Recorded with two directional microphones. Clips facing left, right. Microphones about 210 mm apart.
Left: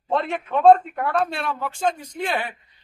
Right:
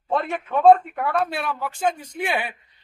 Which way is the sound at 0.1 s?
Centre (ahead or behind).